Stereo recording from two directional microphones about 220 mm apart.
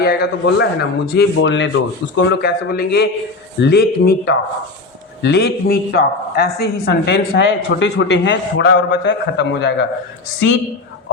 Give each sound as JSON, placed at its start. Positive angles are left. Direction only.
{"t": 0.0, "sound": "speech", "side_deg": 45}